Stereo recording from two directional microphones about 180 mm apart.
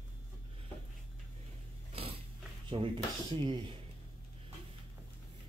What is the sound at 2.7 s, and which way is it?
Speech, 25° right (ahead or behind).